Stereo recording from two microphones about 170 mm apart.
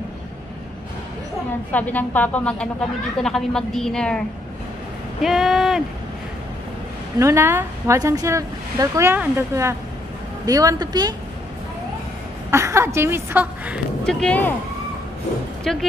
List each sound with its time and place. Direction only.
1.7 s a woman's voice: 10° left (ahead or behind)
5.2 s speech: centre (ahead or behind)
7.2 s a woman's voice: 15° right (ahead or behind)
12.4 s a woman's voice: 15° right (ahead or behind)
14.0 s a woman's voice: 5° left (ahead or behind)
15.7 s a woman's voice: centre (ahead or behind)